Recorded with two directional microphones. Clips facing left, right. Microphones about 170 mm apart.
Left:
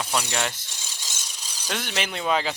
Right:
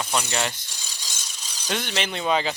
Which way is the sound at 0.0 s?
5° left (ahead or behind).